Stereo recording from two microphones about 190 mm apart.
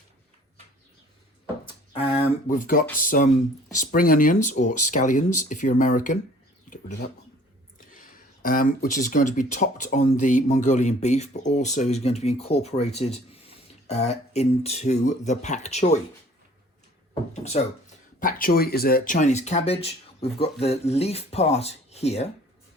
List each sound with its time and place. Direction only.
1.6 s a sound: 30° left (ahead or behind)
2.6 s speech: 45° left (ahead or behind)
17.3 s speech: 35° left (ahead or behind)